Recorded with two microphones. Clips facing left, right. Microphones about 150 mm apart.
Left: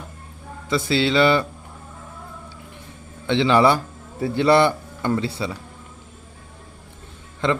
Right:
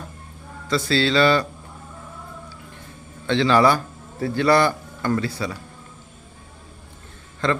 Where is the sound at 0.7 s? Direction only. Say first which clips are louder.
Even; 20° left (ahead or behind).